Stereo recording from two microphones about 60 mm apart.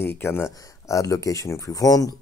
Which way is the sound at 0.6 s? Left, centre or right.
Left.